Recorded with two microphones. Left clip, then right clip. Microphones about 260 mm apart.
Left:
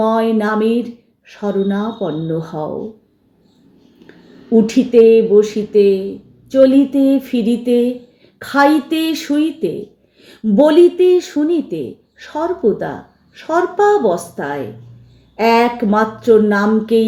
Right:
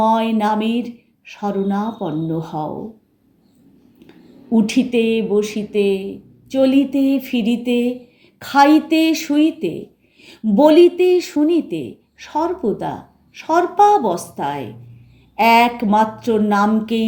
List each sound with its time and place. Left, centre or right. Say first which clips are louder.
0.0 s speech: left 1 dB; centre
4.5 s speech: left 7 dB; centre